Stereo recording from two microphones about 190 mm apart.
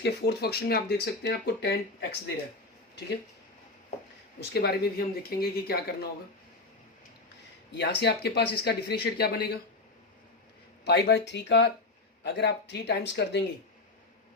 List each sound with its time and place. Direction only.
0.0 s speech: 60° left (ahead or behind)
4.4 s speech: 60° left (ahead or behind)
7.8 s speech: 60° left (ahead or behind)
10.8 s speech: 60° left (ahead or behind)